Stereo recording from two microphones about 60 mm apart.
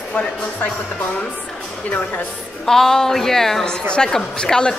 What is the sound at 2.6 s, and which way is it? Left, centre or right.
A woman's voice, centre.